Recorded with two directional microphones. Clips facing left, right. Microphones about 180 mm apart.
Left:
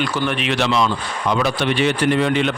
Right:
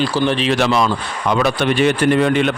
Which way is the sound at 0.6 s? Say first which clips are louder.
Right 2 dB; 50° right (ahead or behind).